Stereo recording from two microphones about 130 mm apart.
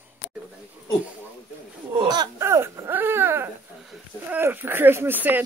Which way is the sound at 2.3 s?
20° right (ahead or behind).